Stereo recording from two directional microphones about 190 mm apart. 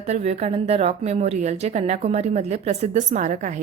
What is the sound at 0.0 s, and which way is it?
A woman's voice, 35° right (ahead or behind).